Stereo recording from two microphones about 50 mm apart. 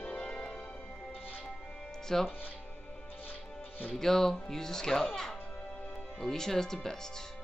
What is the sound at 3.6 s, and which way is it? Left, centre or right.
Music, left.